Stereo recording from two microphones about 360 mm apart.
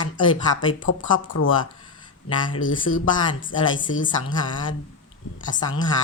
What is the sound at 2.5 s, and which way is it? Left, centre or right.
Speech, left.